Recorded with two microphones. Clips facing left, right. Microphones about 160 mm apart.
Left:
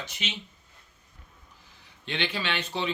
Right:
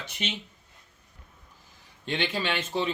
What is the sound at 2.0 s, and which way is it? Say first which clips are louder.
Speech: right 2 dB; 45° right (ahead or behind).